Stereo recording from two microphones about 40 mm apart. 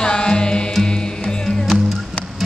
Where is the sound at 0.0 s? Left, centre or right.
Left.